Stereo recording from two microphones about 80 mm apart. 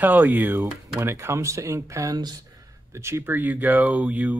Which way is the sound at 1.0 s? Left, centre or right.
Right.